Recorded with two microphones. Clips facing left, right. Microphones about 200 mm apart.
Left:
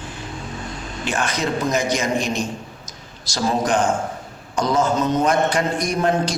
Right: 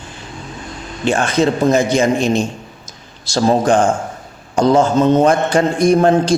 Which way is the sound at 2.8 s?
30° right (ahead or behind).